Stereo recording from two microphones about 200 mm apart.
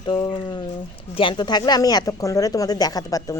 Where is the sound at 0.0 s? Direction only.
25° left (ahead or behind).